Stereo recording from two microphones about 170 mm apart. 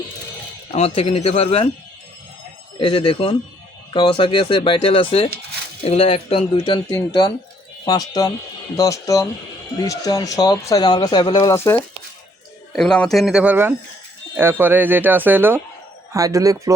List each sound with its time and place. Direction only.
0.7 s speech: 35° left (ahead or behind)
2.7 s speech: 30° left (ahead or behind)
6.9 s speech: 20° left (ahead or behind)
12.7 s a man's voice: 5° left (ahead or behind); by 16.7 s 20° right (ahead or behind)